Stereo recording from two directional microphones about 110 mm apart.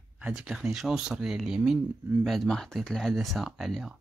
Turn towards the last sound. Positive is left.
turn(degrees=0)  # may be behind; listen again after turning